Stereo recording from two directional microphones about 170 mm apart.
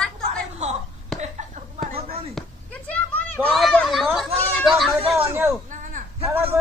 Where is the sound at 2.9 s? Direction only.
10° left (ahead or behind).